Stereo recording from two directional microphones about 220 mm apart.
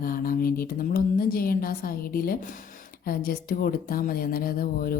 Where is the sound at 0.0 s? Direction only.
40° left (ahead or behind).